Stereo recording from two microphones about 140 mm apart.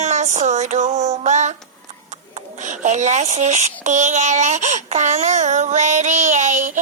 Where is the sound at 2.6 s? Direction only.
60° right (ahead or behind).